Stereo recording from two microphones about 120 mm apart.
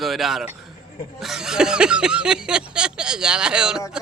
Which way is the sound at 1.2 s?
5° right (ahead or behind).